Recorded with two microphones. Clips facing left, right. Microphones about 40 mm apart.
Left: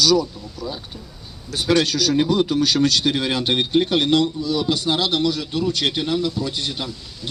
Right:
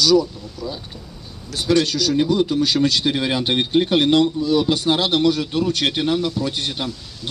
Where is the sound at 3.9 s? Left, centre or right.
Right.